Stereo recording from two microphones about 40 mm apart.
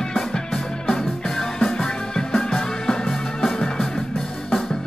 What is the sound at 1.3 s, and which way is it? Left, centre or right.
Music, centre.